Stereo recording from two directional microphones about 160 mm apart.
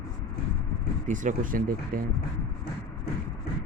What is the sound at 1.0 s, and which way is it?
Speech, 55° right (ahead or behind).